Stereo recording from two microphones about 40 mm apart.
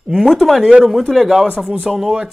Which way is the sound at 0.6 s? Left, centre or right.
Right.